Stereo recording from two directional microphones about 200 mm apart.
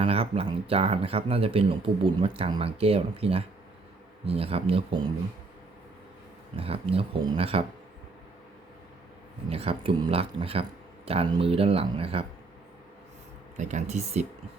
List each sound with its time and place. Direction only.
0.0 s speech: 30° right (ahead or behind)
6.6 s speech: 30° right (ahead or behind)
9.5 s speech: 30° right (ahead or behind)
13.6 s speech: 35° right (ahead or behind)